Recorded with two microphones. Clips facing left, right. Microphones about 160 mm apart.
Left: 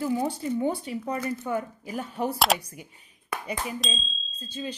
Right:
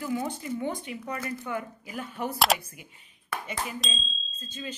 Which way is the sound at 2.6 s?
40° left (ahead or behind).